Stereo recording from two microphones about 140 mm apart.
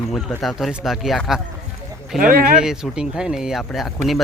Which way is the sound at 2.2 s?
85° right.